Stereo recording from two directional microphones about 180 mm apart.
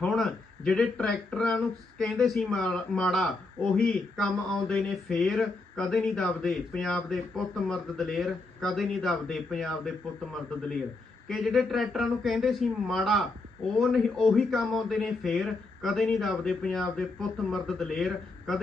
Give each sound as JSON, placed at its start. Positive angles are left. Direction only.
{"t": 0.0, "sound": "speech", "side_deg": 0}
{"t": 11.3, "sound": "speech", "side_deg": 0}